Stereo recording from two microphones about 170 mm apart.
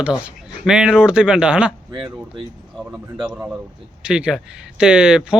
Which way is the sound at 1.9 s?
30° right (ahead or behind).